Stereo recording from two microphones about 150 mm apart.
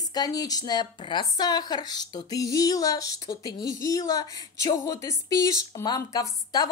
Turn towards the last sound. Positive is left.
turn(degrees=25)  # may be behind; listen again after turning